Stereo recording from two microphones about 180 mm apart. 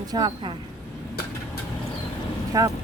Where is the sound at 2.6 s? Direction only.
20° right (ahead or behind).